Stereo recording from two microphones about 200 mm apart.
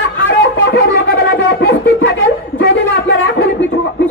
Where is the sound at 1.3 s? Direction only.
60° left (ahead or behind).